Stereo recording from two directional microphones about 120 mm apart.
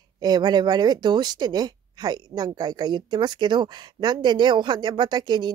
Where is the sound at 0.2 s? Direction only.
35° right (ahead or behind).